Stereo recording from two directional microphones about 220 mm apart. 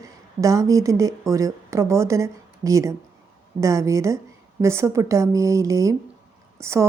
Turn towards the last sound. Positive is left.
turn(degrees=-10)  # may be behind; listen again after turning